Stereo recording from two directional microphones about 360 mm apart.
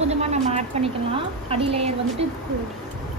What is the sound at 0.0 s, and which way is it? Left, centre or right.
A woman's voice, centre.